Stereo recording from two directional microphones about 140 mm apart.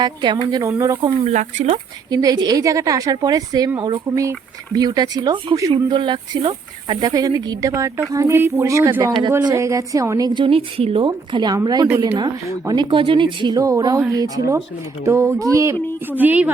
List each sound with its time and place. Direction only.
0.0 s speech: 30° right (ahead or behind)
1.2 s speech: 55° right (ahead or behind)
2.0 s speech: 25° right (ahead or behind)
4.1 s speech: 20° right (ahead or behind)
7.1 s speech: 25° right (ahead or behind)